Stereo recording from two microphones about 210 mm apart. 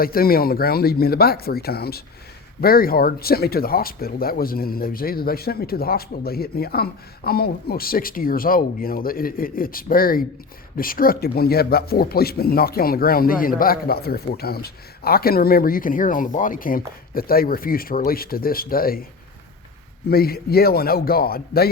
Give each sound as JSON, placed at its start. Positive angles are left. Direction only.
{"t": 0.0, "sound": "speech", "side_deg": 45}
{"t": 20.1, "sound": "speech", "side_deg": 45}